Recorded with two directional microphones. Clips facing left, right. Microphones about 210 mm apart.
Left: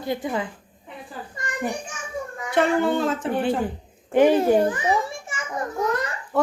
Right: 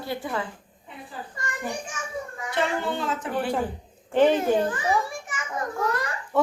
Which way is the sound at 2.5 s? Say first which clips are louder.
Left 7 dB; 50° left (ahead or behind).